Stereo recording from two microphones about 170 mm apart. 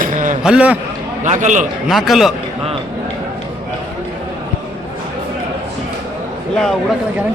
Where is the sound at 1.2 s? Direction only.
45° right (ahead or behind).